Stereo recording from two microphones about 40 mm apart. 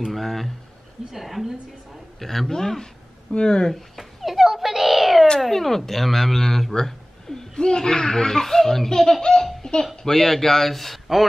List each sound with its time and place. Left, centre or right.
0.1 s speech: centre
2.1 s speech: centre
3.7 s cat: centre
5.4 s speech: centre
9.6 s a sound: centre
10.0 s speech: centre